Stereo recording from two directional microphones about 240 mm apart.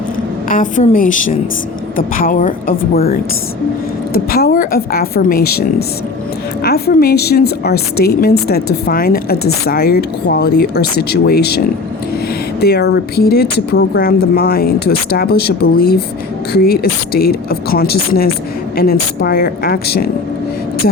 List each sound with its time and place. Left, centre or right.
0.4 s speech: left